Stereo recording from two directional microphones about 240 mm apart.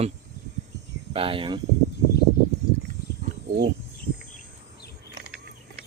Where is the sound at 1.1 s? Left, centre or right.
Right.